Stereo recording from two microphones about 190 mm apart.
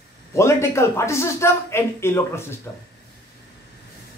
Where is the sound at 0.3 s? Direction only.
15° left (ahead or behind).